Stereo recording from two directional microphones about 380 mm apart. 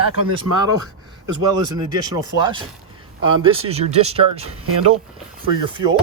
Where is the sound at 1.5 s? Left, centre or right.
Centre.